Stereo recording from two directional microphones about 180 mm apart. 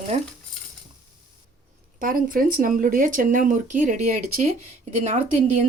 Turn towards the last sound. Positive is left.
turn(degrees=-40)  # may be behind; listen again after turning